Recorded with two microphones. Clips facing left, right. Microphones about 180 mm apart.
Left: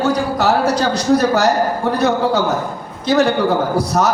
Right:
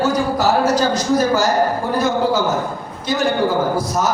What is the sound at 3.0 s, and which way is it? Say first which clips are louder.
Speech: left 5 dB; 70° left (ahead or behind).